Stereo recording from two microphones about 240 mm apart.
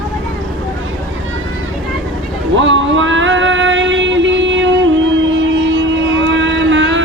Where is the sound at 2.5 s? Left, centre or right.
Right.